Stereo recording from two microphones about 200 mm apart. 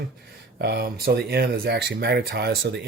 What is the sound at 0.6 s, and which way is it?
Speech, 55° right (ahead or behind).